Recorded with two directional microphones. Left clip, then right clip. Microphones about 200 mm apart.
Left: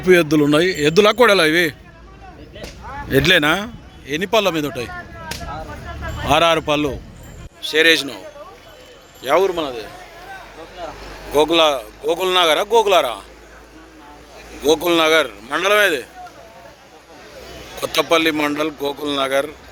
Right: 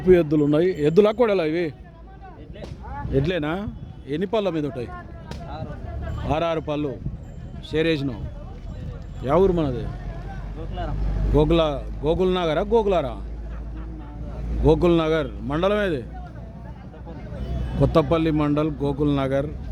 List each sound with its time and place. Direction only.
0.0 s a man's voice: 10° right (ahead or behind)
3.1 s a man's voice: 10° left (ahead or behind)
4.0 s a man's voice: 20° right (ahead or behind)
6.2 s a man's voice: centre (ahead or behind)
7.6 s a man's voice: 5° right (ahead or behind)
9.2 s a man's voice: 15° right (ahead or behind)
11.3 s a man's voice: centre (ahead or behind)
14.6 s a man's voice: centre (ahead or behind)
17.7 s a man's voice: centre (ahead or behind)